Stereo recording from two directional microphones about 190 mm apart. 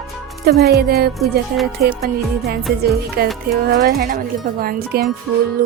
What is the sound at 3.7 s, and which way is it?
Speech, 50° right (ahead or behind).